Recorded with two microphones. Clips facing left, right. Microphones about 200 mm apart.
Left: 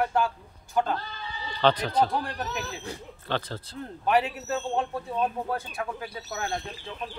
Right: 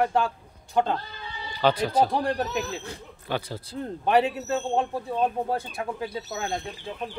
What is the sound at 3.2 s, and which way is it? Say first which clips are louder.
Speech: right 1 dB; 10° right (ahead or behind).